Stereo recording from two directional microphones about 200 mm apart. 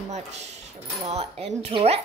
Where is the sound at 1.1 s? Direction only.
30° right (ahead or behind).